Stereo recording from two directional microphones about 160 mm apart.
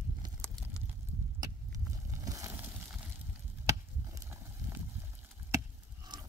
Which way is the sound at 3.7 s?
15° right (ahead or behind).